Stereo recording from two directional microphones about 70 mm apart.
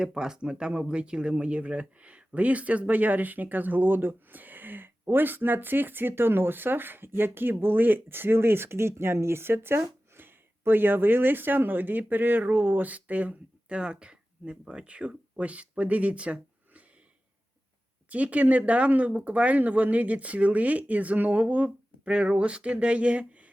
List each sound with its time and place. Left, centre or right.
0.0 s speech: centre
18.1 s speech: centre